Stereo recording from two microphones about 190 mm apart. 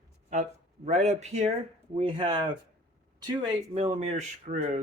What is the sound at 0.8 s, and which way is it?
Speech, 40° right (ahead or behind).